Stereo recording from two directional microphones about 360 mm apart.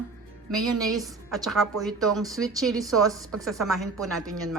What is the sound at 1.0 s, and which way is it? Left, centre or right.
Speech, centre.